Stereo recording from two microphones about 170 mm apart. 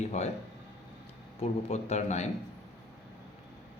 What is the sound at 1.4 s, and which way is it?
Speech, 40° left (ahead or behind).